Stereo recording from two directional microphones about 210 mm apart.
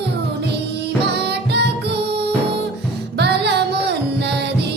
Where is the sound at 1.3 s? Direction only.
55° right (ahead or behind).